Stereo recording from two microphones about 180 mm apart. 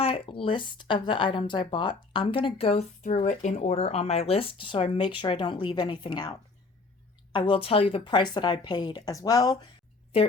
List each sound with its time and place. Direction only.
0.0 s a woman's voice: 30° left (ahead or behind)
7.3 s a woman's voice: 30° left (ahead or behind)